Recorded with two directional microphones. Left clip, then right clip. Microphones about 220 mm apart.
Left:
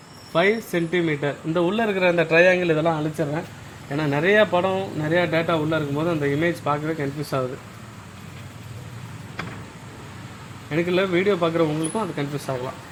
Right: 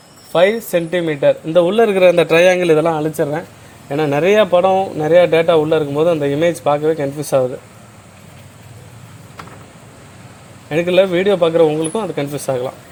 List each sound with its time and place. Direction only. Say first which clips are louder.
0.9 s a man's voice: right 10 dB; 40° right (ahead or behind)
10.7 s a man's voice: right 9 dB; 40° right (ahead or behind)